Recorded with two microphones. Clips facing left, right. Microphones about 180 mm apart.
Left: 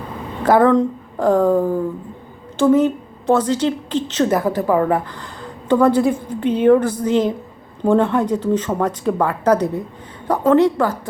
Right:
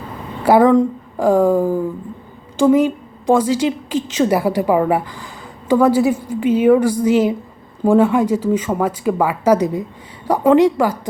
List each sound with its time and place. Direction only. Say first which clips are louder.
0.4 s a woman's voice: right 2 dB; 10° right (ahead or behind)